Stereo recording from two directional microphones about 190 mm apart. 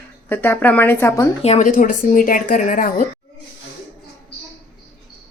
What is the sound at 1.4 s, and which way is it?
A woman's voice, 40° left (ahead or behind).